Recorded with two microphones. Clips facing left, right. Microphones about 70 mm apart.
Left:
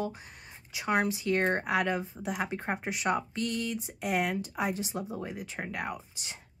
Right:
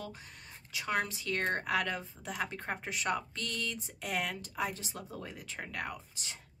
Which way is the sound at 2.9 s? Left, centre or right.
Centre.